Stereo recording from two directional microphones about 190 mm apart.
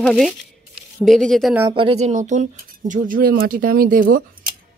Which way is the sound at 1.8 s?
30° right (ahead or behind).